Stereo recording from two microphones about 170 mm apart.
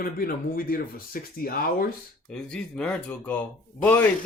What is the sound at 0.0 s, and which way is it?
Speech, 60° left (ahead or behind).